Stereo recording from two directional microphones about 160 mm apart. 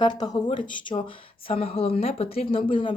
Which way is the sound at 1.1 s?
35° left (ahead or behind).